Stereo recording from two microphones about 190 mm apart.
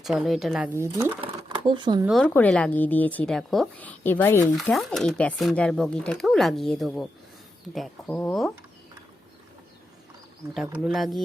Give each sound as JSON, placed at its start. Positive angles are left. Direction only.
{"t": 0.0, "sound": "speech", "side_deg": 0}
{"t": 1.2, "sound": "a sound", "side_deg": -25}
{"t": 2.0, "sound": "a woman's voice", "side_deg": 0}
{"t": 4.5, "sound": "a woman's voice", "side_deg": 0}
{"t": 10.5, "sound": "speech", "side_deg": 0}